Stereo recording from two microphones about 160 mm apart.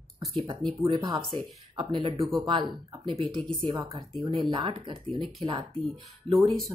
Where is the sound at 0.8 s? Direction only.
30° right (ahead or behind).